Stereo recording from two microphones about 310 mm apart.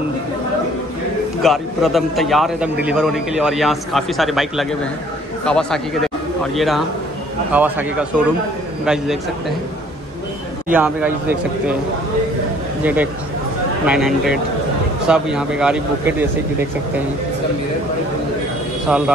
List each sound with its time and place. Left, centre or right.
1.4 s a man's voice: centre
10.7 s a man's voice: centre
12.8 s a man's voice: centre
18.9 s a man's voice: centre